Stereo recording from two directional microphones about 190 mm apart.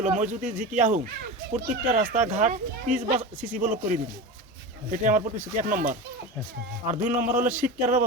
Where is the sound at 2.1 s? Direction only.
40° right (ahead or behind).